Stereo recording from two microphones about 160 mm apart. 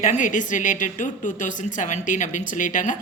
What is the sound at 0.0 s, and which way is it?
A woman's voice, 50° left (ahead or behind).